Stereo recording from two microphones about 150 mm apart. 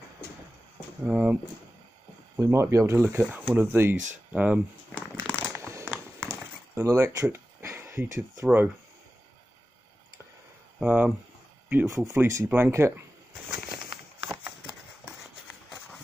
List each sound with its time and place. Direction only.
1.0 s speech: 10° right (ahead or behind)
4.9 s crumpling: 10° left (ahead or behind)
5.4 s a sound: 20° right (ahead or behind)
10.8 s speech: 5° right (ahead or behind)